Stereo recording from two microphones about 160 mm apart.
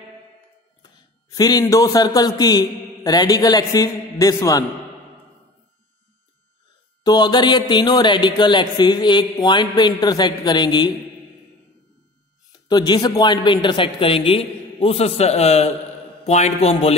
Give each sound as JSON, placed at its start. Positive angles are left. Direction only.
{"t": 0.8, "sound": "a man's voice", "side_deg": 25}
{"t": 7.0, "sound": "speech", "side_deg": 25}
{"t": 12.6, "sound": "a man's voice", "side_deg": 25}